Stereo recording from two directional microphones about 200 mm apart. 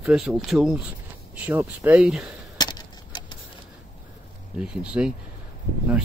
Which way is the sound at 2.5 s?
20° left (ahead or behind).